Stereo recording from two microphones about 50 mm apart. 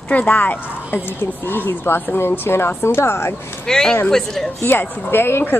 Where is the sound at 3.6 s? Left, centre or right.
Centre.